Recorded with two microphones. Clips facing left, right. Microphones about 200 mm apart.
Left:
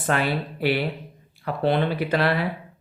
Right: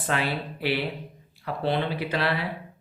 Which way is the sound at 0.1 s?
50° left (ahead or behind).